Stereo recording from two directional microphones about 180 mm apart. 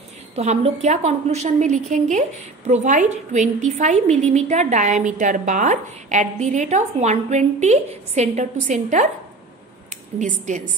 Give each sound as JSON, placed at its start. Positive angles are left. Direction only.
{"t": 0.4, "sound": "a woman's voice", "side_deg": -35}
{"t": 10.1, "sound": "a woman's voice", "side_deg": -40}